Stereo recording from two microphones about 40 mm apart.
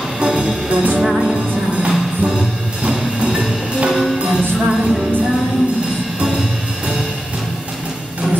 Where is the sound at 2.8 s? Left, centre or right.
Centre.